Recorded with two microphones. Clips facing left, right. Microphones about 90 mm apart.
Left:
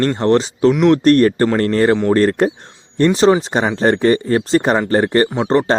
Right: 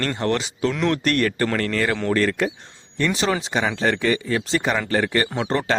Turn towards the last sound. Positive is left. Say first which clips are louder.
# left 8 dB
turn(degrees=30)  # may be behind; listen again after turning